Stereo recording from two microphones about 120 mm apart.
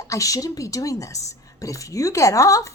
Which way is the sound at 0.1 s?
30° left (ahead or behind).